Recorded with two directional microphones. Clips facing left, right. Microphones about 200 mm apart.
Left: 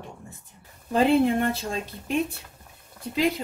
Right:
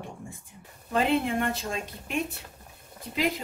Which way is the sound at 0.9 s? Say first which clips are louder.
Left 5 dB; 30° left (ahead or behind).